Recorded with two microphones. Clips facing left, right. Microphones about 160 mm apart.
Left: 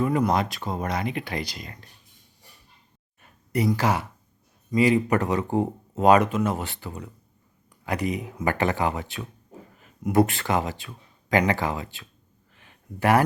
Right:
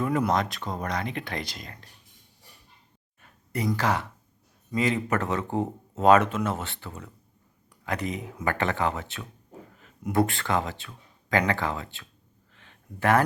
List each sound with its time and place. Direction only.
0.3 s speech: 5° left (ahead or behind)
3.7 s speech: 10° left (ahead or behind)
12.5 s a sound: 15° left (ahead or behind)